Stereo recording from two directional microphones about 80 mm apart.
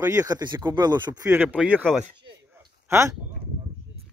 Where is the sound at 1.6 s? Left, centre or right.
Centre.